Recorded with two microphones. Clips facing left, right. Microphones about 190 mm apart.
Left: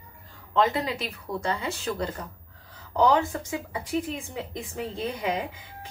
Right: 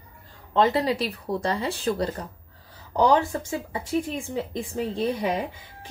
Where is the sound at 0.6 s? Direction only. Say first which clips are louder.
Right 3 dB; 35° right (ahead or behind).